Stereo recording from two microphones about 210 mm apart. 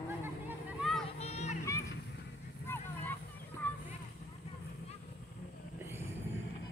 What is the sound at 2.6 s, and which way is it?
Vehicle, 10° left (ahead or behind).